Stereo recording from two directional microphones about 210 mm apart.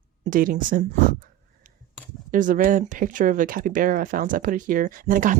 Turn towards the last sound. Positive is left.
turn(degrees=-40)  # may be behind; listen again after turning